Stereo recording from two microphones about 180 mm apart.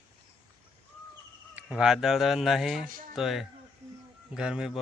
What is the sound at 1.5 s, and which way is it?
Speech, 5° right (ahead or behind).